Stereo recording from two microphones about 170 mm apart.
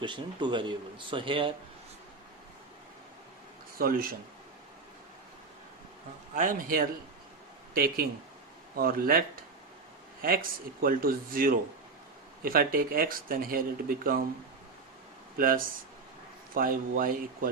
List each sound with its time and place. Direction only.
0.0 s speech: 25° right (ahead or behind)
3.8 s speech: 55° right (ahead or behind)
6.3 s a man's voice: 50° right (ahead or behind)
15.4 s speech: 55° right (ahead or behind)